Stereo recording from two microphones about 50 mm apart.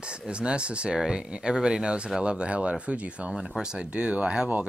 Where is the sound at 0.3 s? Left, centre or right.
Right.